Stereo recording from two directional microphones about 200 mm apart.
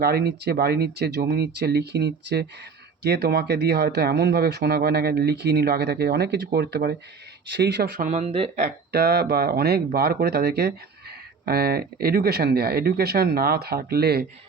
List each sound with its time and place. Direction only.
0.0 s speech: 50° right (ahead or behind)
7.9 s speech: 35° right (ahead or behind)
8.9 s speech: 50° right (ahead or behind)